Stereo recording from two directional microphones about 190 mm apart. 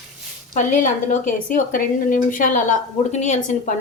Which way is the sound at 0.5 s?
40° left (ahead or behind).